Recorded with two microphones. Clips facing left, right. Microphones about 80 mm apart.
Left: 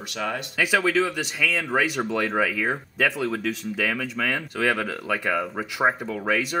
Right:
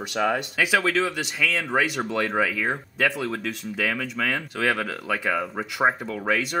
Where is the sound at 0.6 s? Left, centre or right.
Centre.